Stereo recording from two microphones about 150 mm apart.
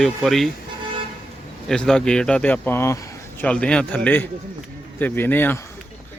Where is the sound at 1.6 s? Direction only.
5° left (ahead or behind).